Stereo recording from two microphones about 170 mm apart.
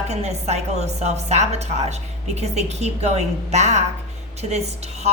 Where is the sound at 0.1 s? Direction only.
40° right (ahead or behind).